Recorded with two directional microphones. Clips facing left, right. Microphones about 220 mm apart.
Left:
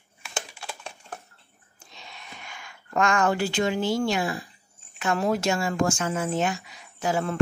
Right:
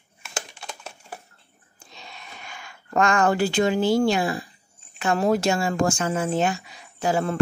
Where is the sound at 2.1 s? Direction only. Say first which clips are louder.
Right 1 dB; 35° right (ahead or behind).